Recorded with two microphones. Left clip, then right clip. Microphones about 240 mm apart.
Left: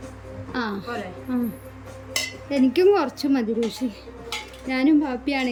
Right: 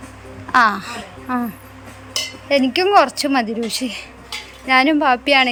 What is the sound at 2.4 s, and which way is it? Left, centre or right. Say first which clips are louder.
Speech: right 2 dB; centre.